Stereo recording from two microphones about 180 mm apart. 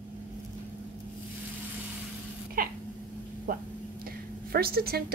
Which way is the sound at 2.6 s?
55° right (ahead or behind).